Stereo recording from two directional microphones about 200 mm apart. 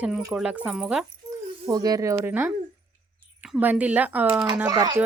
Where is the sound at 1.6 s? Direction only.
20° right (ahead or behind).